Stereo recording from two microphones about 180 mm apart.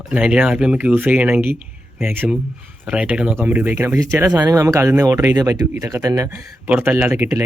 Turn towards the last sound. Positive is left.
turn(degrees=-10)  # may be behind; listen again after turning